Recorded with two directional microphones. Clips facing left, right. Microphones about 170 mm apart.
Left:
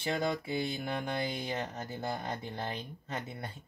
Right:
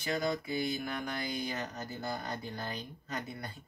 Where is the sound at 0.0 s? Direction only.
25° left (ahead or behind).